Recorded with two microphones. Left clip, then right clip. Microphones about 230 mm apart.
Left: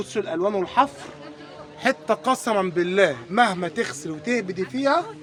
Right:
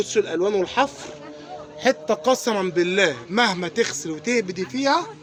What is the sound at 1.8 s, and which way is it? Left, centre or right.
A man's voice, left.